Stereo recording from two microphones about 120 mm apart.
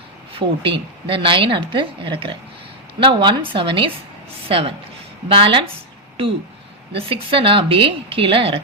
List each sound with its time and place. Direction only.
0.3 s a woman's voice: 45° right (ahead or behind)
6.9 s a woman's voice: 50° right (ahead or behind)